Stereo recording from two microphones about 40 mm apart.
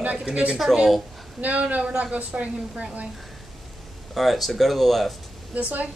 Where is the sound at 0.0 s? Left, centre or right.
Right.